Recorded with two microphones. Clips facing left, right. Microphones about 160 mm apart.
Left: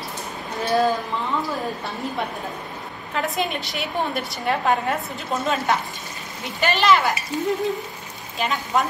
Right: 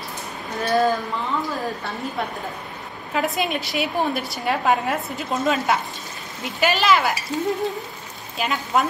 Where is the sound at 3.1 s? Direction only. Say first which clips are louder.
Right 2 dB; centre (ahead or behind).